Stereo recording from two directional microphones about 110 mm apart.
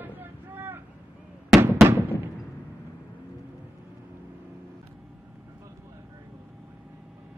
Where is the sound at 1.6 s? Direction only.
25° right (ahead or behind).